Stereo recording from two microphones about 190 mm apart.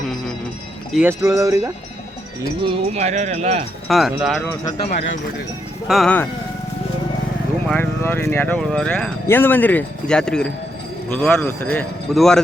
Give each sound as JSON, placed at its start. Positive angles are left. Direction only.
{"t": 0.9, "sound": "speech", "side_deg": -15}
{"t": 2.6, "sound": "speech", "side_deg": -35}
{"t": 3.8, "sound": "a man's voice", "side_deg": 0}
{"t": 5.9, "sound": "a man's voice", "side_deg": 0}
{"t": 7.7, "sound": "a man's voice", "side_deg": 10}